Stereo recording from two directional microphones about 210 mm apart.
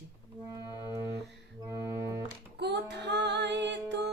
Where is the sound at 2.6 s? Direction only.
55° right (ahead or behind).